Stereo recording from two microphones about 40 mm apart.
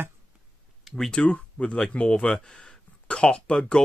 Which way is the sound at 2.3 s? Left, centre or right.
Centre.